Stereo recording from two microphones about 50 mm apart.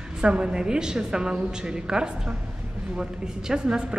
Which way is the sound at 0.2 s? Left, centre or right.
Centre.